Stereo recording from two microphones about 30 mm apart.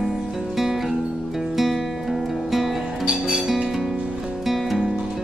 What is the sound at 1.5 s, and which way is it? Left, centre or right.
Music, centre.